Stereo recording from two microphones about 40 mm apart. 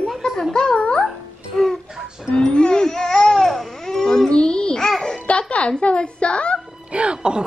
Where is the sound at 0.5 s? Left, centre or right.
Left.